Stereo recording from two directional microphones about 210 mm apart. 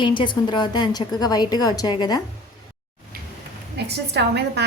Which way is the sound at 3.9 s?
50° right (ahead or behind).